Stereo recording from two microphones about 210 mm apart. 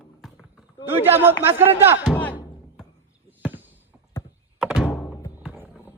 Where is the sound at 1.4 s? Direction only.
10° right (ahead or behind).